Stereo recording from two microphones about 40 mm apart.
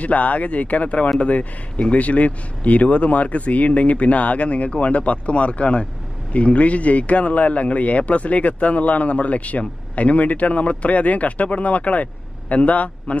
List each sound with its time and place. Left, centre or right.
0.0 s a man's voice: left